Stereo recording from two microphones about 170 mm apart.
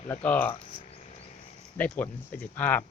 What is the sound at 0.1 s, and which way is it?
Speech, 10° left (ahead or behind).